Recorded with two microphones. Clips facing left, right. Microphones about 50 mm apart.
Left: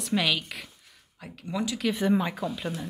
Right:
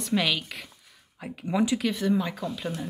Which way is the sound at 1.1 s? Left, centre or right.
Centre.